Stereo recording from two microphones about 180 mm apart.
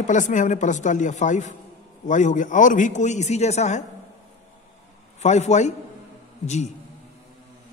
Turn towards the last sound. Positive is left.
turn(degrees=40)  # may be behind; listen again after turning